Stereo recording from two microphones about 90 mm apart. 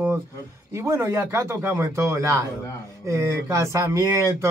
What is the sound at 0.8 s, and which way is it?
Speech, 30° right (ahead or behind).